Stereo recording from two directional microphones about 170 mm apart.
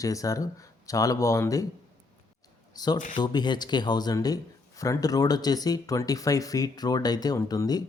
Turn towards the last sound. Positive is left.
turn(degrees=20)  # may be behind; listen again after turning